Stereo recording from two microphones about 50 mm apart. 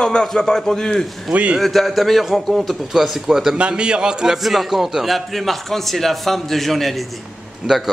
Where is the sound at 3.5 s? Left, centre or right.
Right.